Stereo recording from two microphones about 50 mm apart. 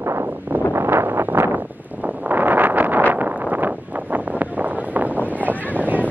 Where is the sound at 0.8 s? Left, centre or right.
Right.